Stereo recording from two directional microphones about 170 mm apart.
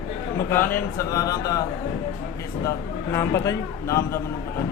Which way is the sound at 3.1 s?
15° left (ahead or behind).